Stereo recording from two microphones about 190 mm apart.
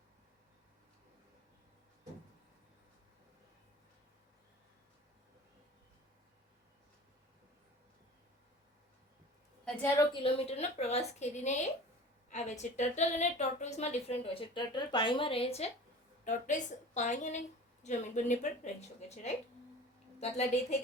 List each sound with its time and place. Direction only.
9.6 s a woman's voice: 15° left (ahead or behind)
10.1 s a woman's voice: 30° left (ahead or behind)